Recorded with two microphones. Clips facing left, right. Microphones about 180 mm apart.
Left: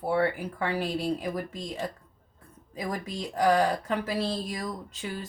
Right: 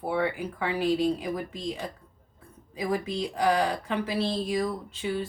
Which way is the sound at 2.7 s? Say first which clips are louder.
Right 5 dB; 45° left (ahead or behind).